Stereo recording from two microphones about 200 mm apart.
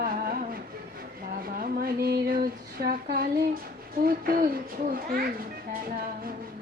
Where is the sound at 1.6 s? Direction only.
50° right (ahead or behind).